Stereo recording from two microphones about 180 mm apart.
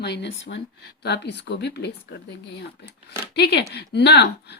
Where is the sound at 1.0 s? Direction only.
70° left (ahead or behind).